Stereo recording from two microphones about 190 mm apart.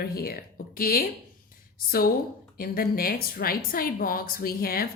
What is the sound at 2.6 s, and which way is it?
Speech, 50° left (ahead or behind).